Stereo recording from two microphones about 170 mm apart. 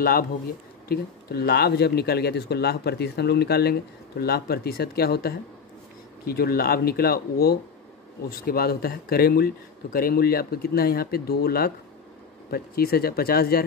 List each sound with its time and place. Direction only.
0.0 s speech: 60° left (ahead or behind)